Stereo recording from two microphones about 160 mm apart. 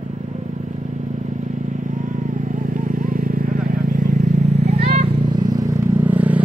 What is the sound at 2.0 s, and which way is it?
Vehicle, 55° right (ahead or behind).